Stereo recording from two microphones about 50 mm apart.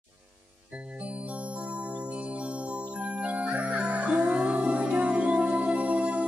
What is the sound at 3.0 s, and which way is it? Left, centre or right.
Music, right.